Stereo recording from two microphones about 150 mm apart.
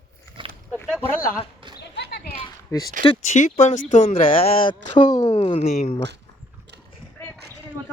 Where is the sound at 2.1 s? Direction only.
90° left.